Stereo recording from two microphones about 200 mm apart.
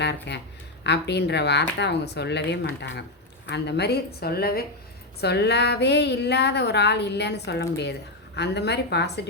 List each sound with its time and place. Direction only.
0.0 s a woman's voice: 60° left (ahead or behind)